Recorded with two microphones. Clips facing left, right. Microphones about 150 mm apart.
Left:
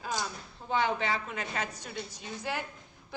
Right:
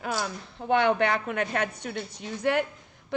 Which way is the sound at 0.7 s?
65° right (ahead or behind).